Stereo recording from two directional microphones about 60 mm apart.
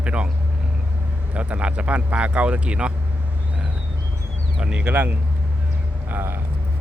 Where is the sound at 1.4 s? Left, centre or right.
Right.